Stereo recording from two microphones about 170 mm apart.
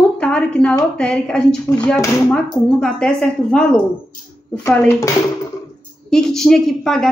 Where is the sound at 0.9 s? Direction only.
5° left (ahead or behind).